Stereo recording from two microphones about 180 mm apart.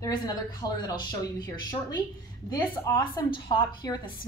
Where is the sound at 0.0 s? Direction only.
20° left (ahead or behind).